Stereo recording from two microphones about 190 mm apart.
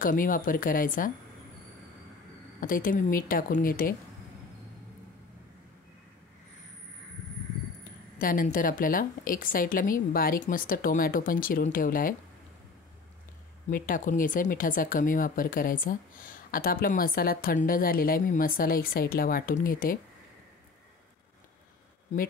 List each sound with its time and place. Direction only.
0.0 s speech: 45° left (ahead or behind)
2.6 s speech: 45° left (ahead or behind)
8.2 s speech: 50° left (ahead or behind)
13.7 s speech: 45° left (ahead or behind)